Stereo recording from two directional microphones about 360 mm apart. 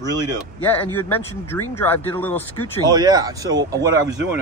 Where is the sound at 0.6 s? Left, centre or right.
Centre.